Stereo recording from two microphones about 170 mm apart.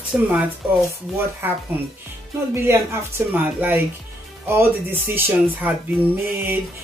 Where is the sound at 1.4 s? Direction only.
10° right (ahead or behind).